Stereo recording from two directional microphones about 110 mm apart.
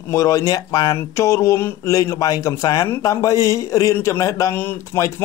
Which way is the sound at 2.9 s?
30° left (ahead or behind).